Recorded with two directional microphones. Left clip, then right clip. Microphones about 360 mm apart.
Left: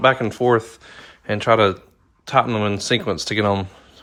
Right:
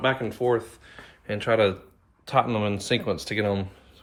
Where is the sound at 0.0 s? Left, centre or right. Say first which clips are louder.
Left 8 dB; centre.